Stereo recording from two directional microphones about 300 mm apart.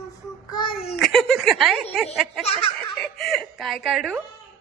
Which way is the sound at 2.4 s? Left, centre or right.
Centre.